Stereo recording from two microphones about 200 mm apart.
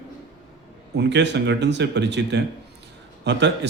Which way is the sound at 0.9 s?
60° right (ahead or behind).